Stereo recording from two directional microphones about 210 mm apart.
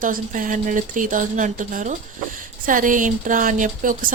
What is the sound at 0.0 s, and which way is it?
A woman's voice, 40° right (ahead or behind).